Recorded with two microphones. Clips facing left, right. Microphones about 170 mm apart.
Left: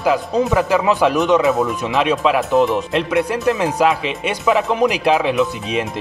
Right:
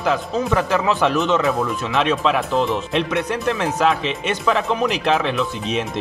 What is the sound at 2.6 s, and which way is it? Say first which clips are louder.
Speech: left 5 dB; 15° left (ahead or behind).